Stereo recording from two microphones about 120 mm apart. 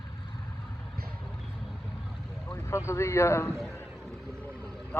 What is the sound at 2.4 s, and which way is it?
Speech, 20° left (ahead or behind).